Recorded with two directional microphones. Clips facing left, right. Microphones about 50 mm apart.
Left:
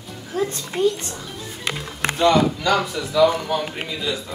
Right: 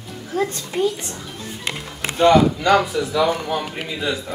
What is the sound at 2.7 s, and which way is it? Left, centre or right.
Speech, centre.